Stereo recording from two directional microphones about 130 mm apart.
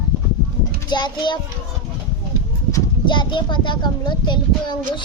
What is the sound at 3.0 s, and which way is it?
A man's voice, 35° left (ahead or behind).